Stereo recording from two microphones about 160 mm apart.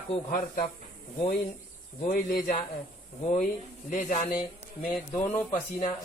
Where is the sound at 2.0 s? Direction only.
60° left (ahead or behind).